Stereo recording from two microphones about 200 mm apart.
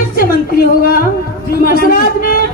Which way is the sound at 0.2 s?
45° left (ahead or behind).